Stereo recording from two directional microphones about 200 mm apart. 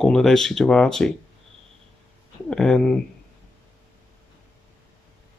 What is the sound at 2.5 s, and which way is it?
Speech, 5° left (ahead or behind).